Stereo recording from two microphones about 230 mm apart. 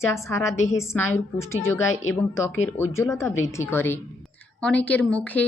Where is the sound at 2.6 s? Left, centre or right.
Centre.